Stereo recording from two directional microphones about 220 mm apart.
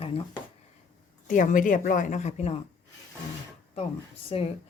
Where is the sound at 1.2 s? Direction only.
35° left (ahead or behind).